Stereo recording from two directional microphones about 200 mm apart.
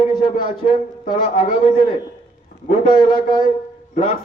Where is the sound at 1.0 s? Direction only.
40° left (ahead or behind).